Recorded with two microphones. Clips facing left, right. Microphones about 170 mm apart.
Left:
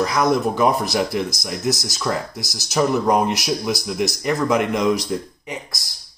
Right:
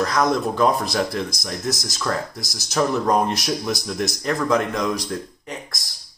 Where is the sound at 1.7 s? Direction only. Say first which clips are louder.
Left 5 dB; 15° right (ahead or behind).